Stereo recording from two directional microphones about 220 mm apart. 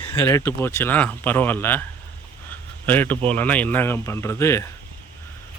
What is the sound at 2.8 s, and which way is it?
Speech, 10° left (ahead or behind).